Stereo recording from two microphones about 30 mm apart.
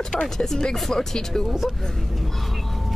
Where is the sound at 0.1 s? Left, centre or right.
Left.